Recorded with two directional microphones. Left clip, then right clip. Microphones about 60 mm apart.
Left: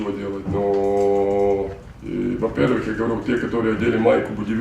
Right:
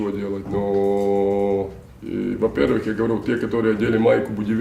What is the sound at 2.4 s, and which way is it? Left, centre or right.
Speech, left.